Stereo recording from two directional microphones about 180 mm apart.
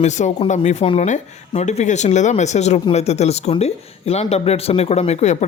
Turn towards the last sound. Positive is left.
turn(degrees=40)  # may be behind; listen again after turning